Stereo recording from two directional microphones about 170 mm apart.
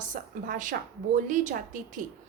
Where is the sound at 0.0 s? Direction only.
50° right (ahead or behind).